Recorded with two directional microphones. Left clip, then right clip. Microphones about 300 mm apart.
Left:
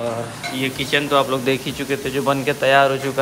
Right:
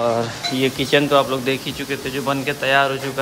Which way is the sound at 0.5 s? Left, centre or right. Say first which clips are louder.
Right 3 dB; centre.